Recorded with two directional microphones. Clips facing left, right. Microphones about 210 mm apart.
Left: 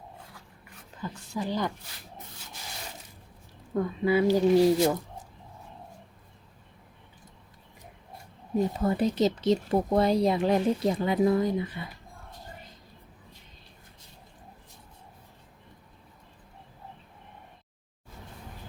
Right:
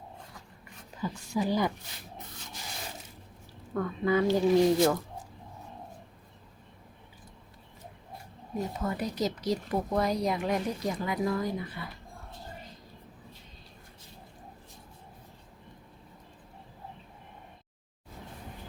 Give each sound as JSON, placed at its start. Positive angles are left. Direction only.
{"t": 1.0, "sound": "a woman's voice", "side_deg": -10}
{"t": 3.8, "sound": "speech", "side_deg": 15}
{"t": 8.8, "sound": "speech", "side_deg": 25}